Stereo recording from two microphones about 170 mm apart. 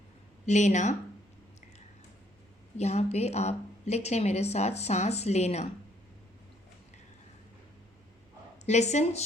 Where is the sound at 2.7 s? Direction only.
40° left (ahead or behind).